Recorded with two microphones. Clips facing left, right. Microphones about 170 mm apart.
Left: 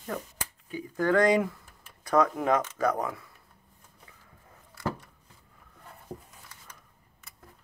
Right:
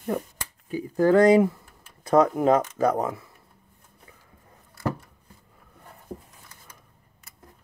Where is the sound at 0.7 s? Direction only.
35° right (ahead or behind).